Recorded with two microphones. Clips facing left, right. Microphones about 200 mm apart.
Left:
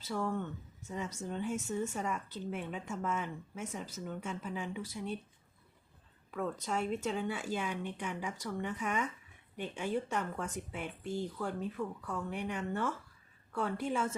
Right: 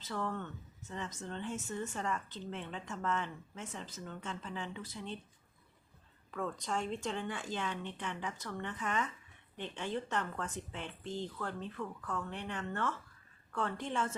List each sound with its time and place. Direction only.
0.0 s speech: 10° left (ahead or behind)
6.3 s speech: 5° left (ahead or behind)